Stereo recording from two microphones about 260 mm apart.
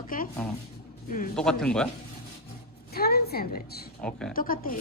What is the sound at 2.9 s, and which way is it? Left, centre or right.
Speech, left.